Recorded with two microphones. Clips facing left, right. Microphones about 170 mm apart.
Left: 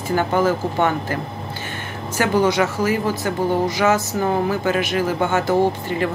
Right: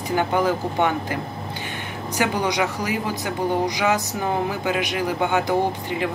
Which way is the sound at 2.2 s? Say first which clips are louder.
Left 5 dB; 15° right (ahead or behind).